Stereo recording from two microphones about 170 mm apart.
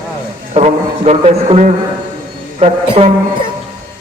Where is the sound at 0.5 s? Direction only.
40° right (ahead or behind).